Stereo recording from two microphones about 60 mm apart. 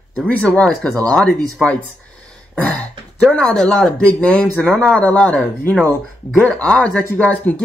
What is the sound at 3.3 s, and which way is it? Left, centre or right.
Speech, centre.